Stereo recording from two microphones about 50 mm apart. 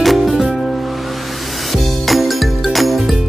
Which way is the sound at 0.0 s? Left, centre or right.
Centre.